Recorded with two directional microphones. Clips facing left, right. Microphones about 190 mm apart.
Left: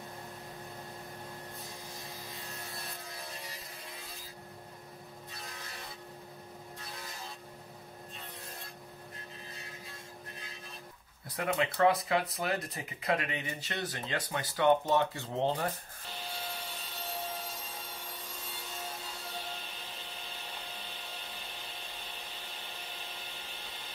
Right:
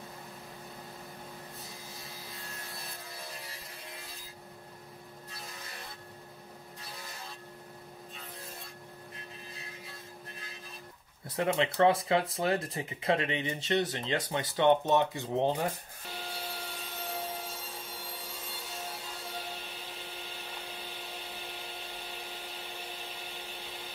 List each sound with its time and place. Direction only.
2.7 s sawing: centre (ahead or behind)
11.2 s speech: 25° right (ahead or behind)